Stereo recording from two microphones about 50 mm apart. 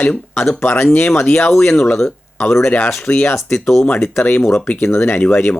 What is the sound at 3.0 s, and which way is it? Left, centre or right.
Speech, left.